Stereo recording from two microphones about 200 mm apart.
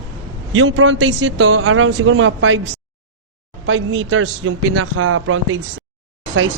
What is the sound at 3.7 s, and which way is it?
A man's voice, 70° right (ahead or behind).